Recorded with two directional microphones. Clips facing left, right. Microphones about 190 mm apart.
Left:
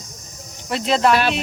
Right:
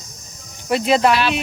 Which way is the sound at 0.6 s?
5° right (ahead or behind).